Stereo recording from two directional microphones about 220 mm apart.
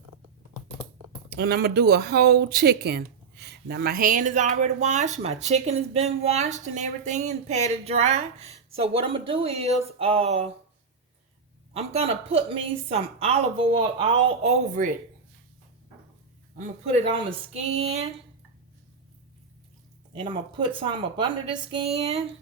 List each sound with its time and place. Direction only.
1.4 s speech: 45° right (ahead or behind); by 10.5 s 30° right (ahead or behind)
11.7 s a woman's voice: 25° right (ahead or behind)
16.6 s a woman's voice: 30° right (ahead or behind)
20.1 s a woman's voice: 25° right (ahead or behind)